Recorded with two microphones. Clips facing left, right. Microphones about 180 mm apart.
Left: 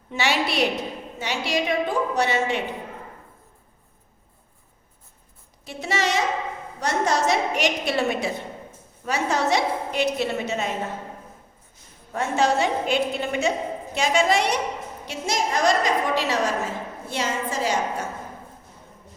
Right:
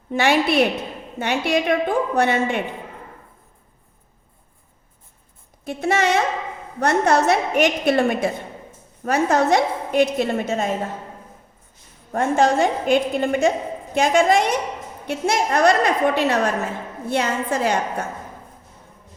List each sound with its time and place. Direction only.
0.1 s a woman's voice: 55° right (ahead or behind)
5.6 s a woman's voice: 55° right (ahead or behind)
12.1 s a woman's voice: 50° right (ahead or behind)